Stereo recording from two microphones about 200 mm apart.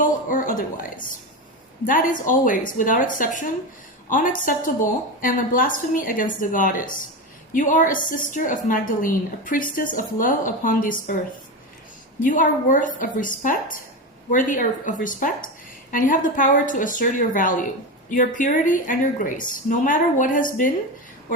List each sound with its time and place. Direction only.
0.0 s a woman's voice: 40° left (ahead or behind)
12.2 s a woman's voice: 40° left (ahead or behind)